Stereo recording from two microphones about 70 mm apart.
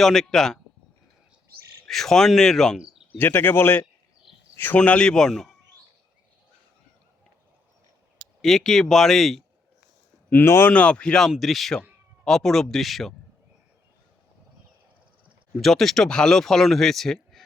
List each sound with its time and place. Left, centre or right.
0.0 s speech: centre
1.9 s speech: centre
3.2 s a man's voice: left
4.8 s speech: centre
8.4 s speech: centre
10.4 s speech: left
10.7 s speech: centre
15.6 s speech: centre